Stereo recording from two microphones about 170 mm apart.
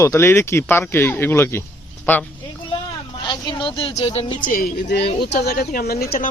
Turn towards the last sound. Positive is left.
turn(degrees=60)  # may be behind; listen again after turning